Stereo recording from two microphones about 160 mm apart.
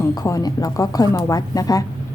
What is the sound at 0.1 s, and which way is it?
A woman's voice, 25° left (ahead or behind).